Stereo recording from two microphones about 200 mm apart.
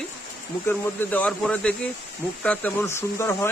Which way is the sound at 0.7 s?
10° left (ahead or behind).